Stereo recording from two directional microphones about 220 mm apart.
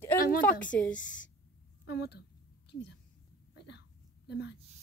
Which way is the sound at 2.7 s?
55° left (ahead or behind).